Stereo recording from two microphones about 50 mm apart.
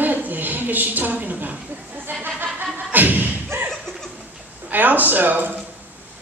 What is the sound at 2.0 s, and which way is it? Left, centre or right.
Thump, right.